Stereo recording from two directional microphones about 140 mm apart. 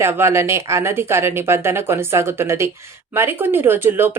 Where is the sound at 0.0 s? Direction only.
20° right (ahead or behind).